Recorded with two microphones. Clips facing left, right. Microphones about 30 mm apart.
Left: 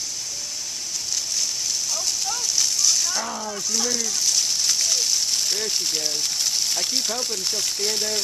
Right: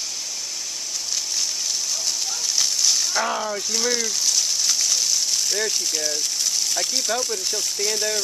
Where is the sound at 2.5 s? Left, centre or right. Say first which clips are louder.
Right 1 dB; centre.